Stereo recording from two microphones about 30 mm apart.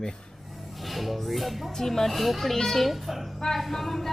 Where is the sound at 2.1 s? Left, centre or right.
Centre.